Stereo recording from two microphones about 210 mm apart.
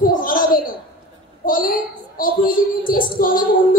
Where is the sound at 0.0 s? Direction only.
45° left (ahead or behind).